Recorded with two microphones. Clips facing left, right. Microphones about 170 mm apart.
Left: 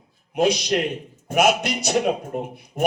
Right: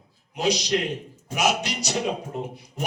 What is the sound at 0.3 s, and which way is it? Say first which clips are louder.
A man's voice: left 4 dB; 55° left (ahead or behind).